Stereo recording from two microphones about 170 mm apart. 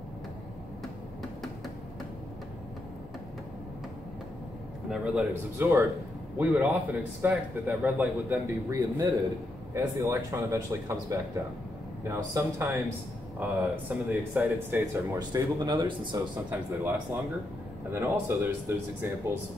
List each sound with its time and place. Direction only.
4.8 s a man's voice: 5° right (ahead or behind)
8.7 s a man's voice: 20° right (ahead or behind)
15.1 s speech: 25° right (ahead or behind)
16.4 s a man's voice: 15° right (ahead or behind)